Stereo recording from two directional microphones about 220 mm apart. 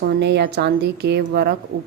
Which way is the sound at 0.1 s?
50° right (ahead or behind).